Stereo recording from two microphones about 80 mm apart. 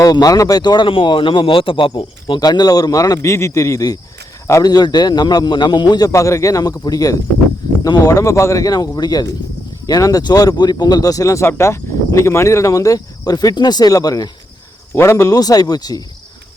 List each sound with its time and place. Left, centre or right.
0.0 s speech: left
2.4 s speech: left
3.2 s a man's voice: left
4.6 s a man's voice: left
6.1 s a man's voice: left
11.4 s speech: left
14.9 s a man's voice: left
15.3 s speech: left